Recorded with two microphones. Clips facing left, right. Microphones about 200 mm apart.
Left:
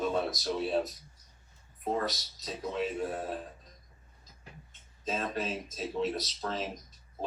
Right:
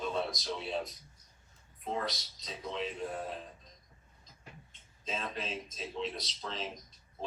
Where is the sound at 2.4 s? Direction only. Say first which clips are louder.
Left 5 dB; 45° left (ahead or behind).